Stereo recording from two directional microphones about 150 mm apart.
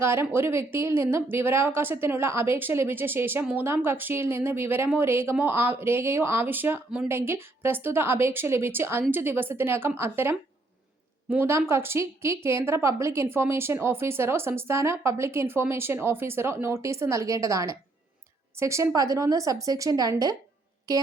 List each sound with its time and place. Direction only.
0.0 s a woman's voice: 15° right (ahead or behind)